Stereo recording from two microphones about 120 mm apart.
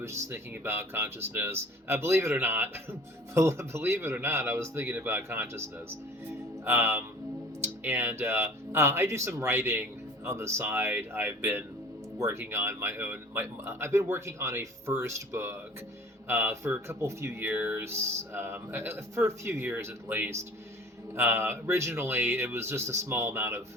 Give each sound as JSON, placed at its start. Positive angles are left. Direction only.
{"t": 0.0, "sound": "speech", "side_deg": -25}